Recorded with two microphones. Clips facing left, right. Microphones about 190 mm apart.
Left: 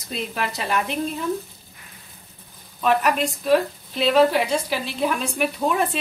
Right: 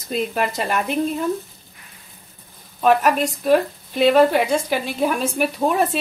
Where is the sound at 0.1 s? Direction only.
50° right (ahead or behind).